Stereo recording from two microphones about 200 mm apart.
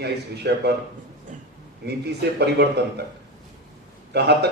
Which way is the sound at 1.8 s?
55° right (ahead or behind).